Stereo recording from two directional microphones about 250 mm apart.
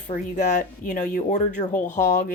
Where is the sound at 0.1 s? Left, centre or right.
Left.